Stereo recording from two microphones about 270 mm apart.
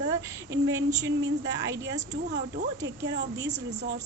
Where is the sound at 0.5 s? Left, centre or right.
Centre.